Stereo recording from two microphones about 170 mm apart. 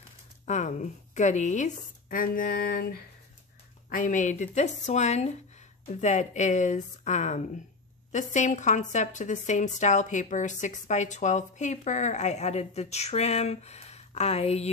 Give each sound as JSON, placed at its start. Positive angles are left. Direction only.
{"t": 0.5, "sound": "a woman's voice", "side_deg": 45}